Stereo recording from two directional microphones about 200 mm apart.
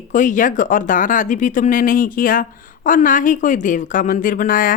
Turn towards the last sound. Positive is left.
turn(degrees=45)  # may be behind; listen again after turning